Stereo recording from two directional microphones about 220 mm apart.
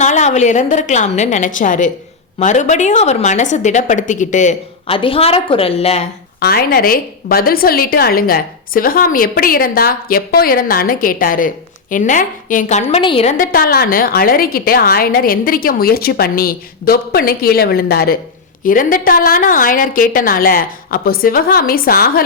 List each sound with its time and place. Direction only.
0.0 s a woman's voice: 30° left (ahead or behind)
6.4 s a woman's voice: 45° left (ahead or behind); by 13.3 s 25° left (ahead or behind)
13.3 s a woman's voice: 40° left (ahead or behind)